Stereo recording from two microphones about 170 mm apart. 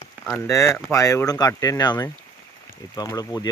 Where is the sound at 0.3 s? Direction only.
15° left (ahead or behind).